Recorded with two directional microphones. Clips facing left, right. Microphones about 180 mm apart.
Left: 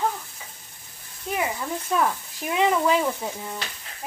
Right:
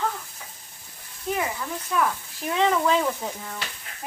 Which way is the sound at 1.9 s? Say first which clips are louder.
Left 1 dB; 30° left (ahead or behind).